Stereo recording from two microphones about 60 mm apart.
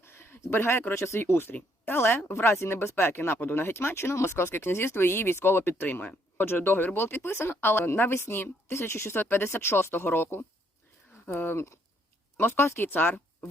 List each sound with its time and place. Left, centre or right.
0.0 s speech: left
1.2 s speech: left
12.9 s speech: left